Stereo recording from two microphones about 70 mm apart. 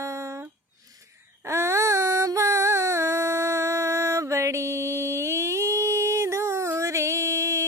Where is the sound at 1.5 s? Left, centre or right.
Right.